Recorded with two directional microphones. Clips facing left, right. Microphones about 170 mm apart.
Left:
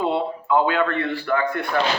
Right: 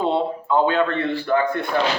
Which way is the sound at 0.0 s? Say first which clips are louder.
Right 2 dB; 25° right (ahead or behind).